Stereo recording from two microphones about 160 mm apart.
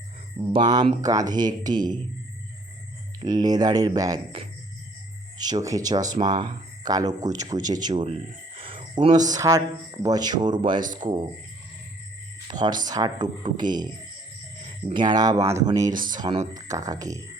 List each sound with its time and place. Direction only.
0.5 s speech: 25° right (ahead or behind)
3.2 s speech: 25° right (ahead or behind)
5.4 s speech: 25° right (ahead or behind)
12.5 s speech: 25° right (ahead or behind)
16.0 s speech: 60° right (ahead or behind)
16.6 s speech: 20° right (ahead or behind)